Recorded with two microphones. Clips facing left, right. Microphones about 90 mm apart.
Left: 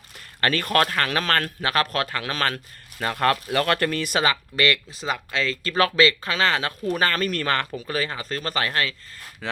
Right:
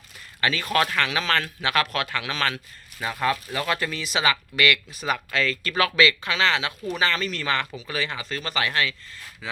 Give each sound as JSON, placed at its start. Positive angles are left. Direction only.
{"t": 0.4, "sound": "a man's voice", "side_deg": 50}
{"t": 3.0, "sound": "speech", "side_deg": 60}
{"t": 4.3, "sound": "speech", "side_deg": 35}
{"t": 9.4, "sound": "speech", "side_deg": 60}